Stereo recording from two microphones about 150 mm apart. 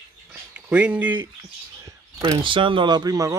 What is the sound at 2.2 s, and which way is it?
Speech, 30° right (ahead or behind).